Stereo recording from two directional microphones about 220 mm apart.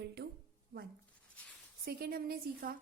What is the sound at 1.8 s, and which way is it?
Speech, 45° right (ahead or behind).